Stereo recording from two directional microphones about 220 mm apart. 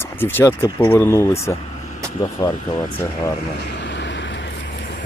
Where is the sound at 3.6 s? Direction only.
50° left (ahead or behind).